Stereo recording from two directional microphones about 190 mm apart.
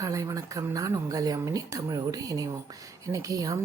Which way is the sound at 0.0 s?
15° right (ahead or behind).